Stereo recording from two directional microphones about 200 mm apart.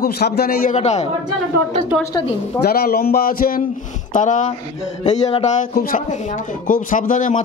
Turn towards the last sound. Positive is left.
turn(degrees=40)  # may be behind; listen again after turning